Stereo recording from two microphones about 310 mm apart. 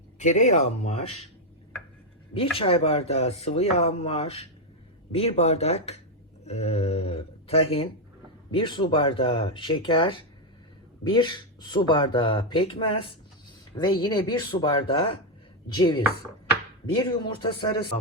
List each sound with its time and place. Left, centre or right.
0.2 s speech: left
2.6 s speech: centre